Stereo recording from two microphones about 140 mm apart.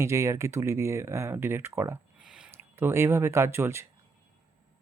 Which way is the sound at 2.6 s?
15° right (ahead or behind).